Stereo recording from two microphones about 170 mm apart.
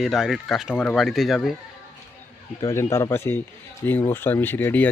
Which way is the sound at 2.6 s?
15° left (ahead or behind).